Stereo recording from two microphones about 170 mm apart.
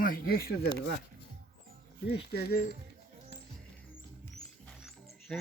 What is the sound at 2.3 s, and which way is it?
Speech, 70° left (ahead or behind).